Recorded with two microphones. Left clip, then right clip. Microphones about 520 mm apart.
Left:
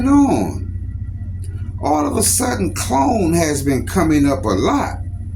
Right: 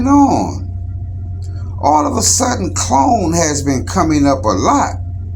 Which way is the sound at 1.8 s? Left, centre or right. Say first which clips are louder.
Right 5 dB; left.